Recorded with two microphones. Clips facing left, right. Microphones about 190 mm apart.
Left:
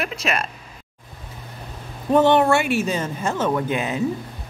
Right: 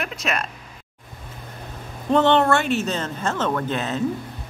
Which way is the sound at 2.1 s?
10° left (ahead or behind).